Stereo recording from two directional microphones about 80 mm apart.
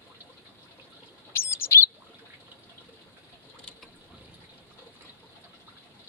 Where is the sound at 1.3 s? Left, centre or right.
Left.